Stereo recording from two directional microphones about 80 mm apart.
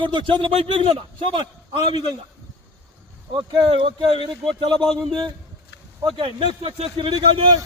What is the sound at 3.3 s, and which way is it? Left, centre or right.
Speech, right.